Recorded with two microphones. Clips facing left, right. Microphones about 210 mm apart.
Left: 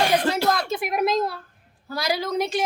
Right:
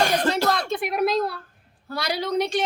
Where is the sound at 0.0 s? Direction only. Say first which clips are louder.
Left 1 dB; 45° right (ahead or behind).